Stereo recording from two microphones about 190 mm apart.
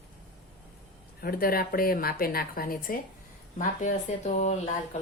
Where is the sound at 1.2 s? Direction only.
50° left (ahead or behind).